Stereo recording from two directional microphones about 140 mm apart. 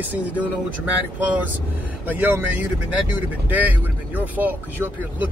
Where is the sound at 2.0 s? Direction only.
15° right (ahead or behind).